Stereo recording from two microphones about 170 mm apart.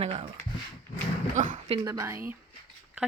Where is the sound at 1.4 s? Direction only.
45° right (ahead or behind).